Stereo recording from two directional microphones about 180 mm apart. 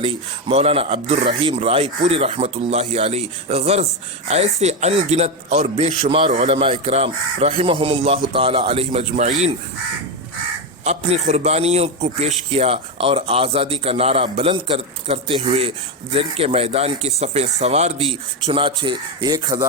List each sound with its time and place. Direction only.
0.0 s speech: 30° right (ahead or behind)
10.8 s speech: 35° right (ahead or behind)